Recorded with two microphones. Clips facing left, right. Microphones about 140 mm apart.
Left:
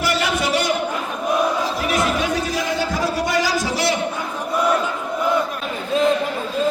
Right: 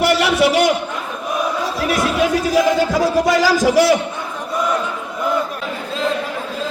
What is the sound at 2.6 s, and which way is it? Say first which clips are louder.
Music: right 7 dB; 90° right.